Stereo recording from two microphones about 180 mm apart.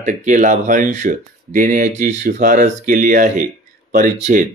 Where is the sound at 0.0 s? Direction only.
45° right (ahead or behind).